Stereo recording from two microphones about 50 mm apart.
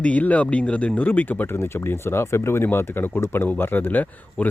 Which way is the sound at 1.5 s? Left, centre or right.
Left.